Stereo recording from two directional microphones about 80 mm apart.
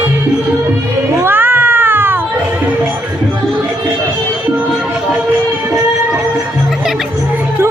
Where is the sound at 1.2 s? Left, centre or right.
Right.